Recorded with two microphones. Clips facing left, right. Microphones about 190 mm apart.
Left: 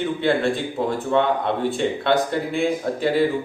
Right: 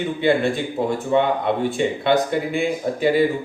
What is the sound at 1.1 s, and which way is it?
Speech, 10° right (ahead or behind).